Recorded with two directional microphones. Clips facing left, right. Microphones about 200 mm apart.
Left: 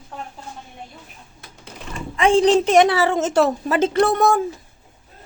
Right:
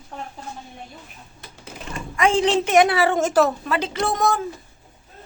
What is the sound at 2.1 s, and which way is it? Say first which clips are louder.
Speech: left 4 dB; 30° left (ahead or behind).